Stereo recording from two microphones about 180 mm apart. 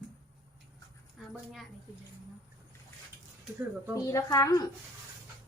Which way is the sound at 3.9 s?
15° left (ahead or behind).